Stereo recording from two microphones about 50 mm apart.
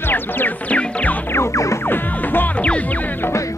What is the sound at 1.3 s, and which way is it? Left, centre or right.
Music, left.